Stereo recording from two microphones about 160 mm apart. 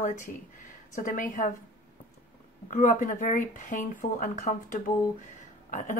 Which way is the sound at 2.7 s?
55° left (ahead or behind).